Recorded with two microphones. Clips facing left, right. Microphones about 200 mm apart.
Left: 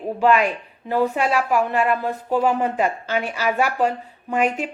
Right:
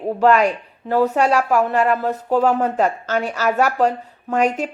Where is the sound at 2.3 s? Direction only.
10° left (ahead or behind).